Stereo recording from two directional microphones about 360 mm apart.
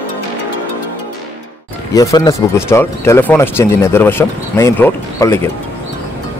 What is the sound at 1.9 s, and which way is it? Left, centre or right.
Speech, centre.